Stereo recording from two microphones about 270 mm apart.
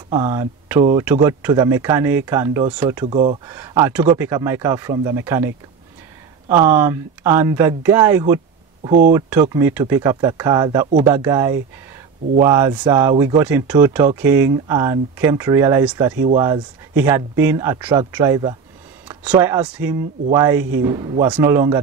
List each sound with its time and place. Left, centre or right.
0.1 s speech: centre
6.5 s speech: centre
13.4 s speech: centre